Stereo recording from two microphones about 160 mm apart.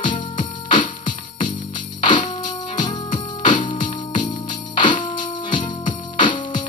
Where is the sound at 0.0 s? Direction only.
30° left (ahead or behind).